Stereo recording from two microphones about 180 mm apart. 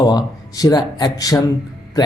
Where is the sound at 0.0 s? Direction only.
20° left (ahead or behind).